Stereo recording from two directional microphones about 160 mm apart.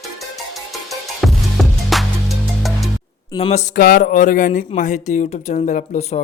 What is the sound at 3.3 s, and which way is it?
Speech, 40° left (ahead or behind).